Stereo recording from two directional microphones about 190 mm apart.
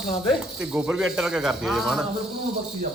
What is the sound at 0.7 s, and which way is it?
A man's voice, 10° right (ahead or behind).